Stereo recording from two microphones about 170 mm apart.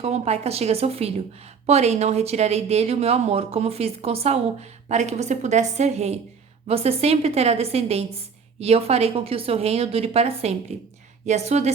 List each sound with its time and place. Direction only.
0.0 s speech: 40° right (ahead or behind)